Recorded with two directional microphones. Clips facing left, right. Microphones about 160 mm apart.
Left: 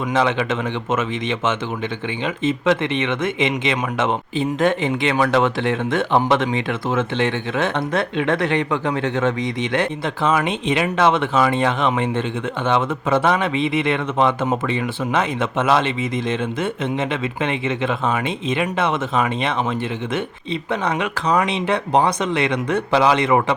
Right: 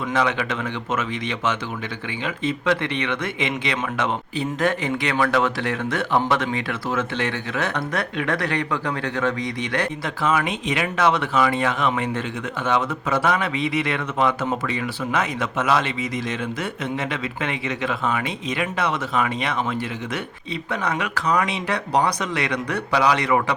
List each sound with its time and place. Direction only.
0.1 s speech: 25° left (ahead or behind)
20.7 s speech: 25° left (ahead or behind)